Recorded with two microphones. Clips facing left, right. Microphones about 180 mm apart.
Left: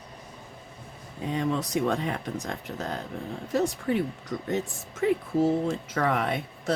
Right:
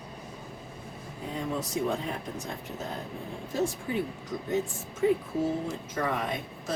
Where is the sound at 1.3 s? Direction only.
75° left (ahead or behind).